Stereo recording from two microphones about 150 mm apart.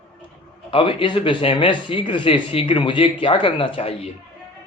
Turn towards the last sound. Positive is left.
turn(degrees=35)  # may be behind; listen again after turning